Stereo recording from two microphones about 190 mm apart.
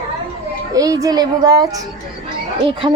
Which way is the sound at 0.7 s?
20° right (ahead or behind).